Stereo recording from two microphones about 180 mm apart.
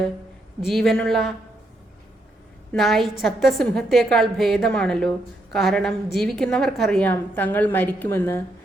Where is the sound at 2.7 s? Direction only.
Centre (ahead or behind).